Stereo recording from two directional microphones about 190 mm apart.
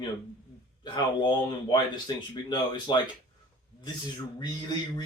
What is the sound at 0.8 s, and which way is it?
Speech, 25° left (ahead or behind).